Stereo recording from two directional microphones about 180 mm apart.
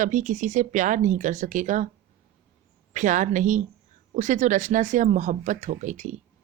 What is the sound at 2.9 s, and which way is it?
Speech, 45° right (ahead or behind).